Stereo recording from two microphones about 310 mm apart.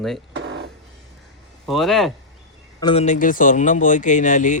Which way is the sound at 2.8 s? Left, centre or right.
Centre.